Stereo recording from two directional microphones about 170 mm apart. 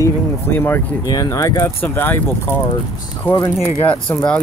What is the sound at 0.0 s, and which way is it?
Speech, 15° left (ahead or behind).